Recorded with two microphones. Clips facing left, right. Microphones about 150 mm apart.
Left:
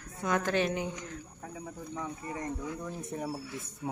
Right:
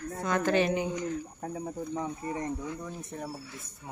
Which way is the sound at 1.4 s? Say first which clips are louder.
Right 5 dB; 35° right (ahead or behind).